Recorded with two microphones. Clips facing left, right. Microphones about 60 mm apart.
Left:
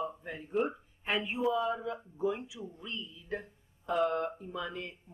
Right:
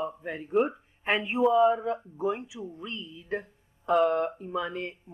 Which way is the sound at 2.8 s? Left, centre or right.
Right.